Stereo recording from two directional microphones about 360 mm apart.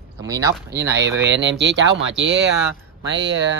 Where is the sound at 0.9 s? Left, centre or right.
Right.